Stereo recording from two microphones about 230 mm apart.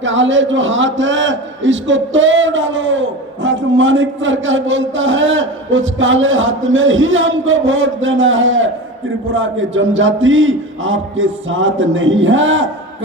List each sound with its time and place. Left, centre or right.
0.0 s a man's voice: right